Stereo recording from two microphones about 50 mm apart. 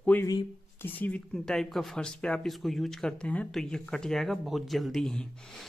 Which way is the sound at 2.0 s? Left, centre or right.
Centre.